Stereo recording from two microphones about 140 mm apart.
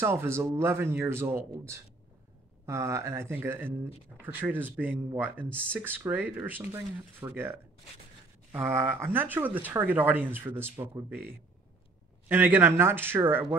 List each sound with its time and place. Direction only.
0.0 s speech: 15° right (ahead or behind)
2.6 s speech: 20° right (ahead or behind)